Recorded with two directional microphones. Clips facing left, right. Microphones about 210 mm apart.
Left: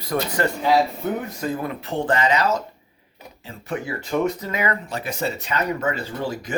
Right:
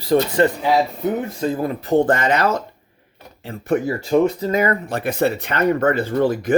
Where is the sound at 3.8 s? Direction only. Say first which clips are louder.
Right 4 dB; 35° right (ahead or behind); by 6.5 s 55° right (ahead or behind).